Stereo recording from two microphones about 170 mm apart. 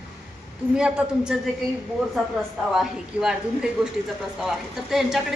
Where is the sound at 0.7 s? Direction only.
5° right (ahead or behind).